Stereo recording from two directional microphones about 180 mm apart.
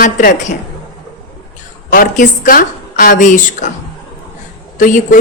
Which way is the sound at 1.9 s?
50° left (ahead or behind).